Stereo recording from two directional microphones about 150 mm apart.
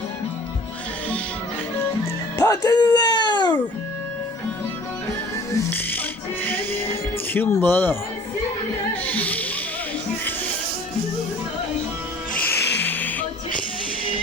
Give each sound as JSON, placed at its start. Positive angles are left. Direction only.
{"t": 2.4, "sound": "music", "side_deg": 25}
{"t": 5.5, "sound": "music", "side_deg": 15}
{"t": 7.3, "sound": "speech", "side_deg": 10}
{"t": 9.0, "sound": "snake", "side_deg": 10}
{"t": 12.8, "sound": "music", "side_deg": 10}